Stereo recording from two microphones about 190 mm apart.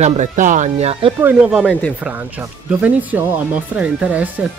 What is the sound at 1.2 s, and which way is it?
Speech, 10° right (ahead or behind).